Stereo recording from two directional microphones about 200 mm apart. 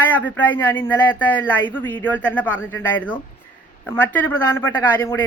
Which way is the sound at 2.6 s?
75° left (ahead or behind).